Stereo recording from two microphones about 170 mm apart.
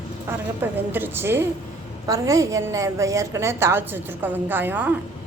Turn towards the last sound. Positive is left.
turn(degrees=-10)  # may be behind; listen again after turning